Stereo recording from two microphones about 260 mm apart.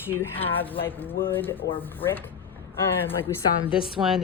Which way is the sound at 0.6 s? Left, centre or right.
Centre.